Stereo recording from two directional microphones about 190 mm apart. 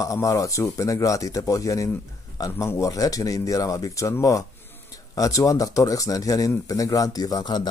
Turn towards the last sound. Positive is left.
turn(degrees=20)  # may be behind; listen again after turning